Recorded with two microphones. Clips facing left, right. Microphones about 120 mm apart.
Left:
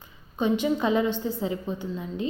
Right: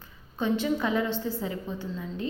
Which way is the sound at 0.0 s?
15° left (ahead or behind).